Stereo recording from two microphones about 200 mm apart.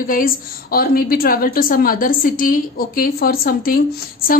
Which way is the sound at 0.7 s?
45° left (ahead or behind).